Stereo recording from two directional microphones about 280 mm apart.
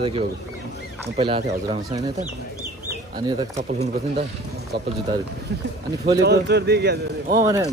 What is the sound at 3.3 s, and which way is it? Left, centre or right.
Speech, centre.